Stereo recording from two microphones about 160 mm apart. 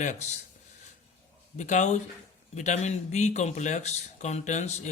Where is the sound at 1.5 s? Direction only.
50° left (ahead or behind).